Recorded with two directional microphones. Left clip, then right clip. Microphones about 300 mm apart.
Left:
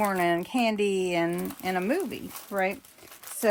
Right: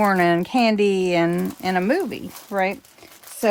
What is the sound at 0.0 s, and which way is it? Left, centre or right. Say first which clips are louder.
Speech: right 7 dB; right.